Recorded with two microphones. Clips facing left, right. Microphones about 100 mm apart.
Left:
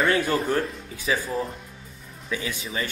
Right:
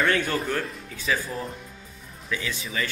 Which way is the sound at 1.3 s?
Centre (ahead or behind).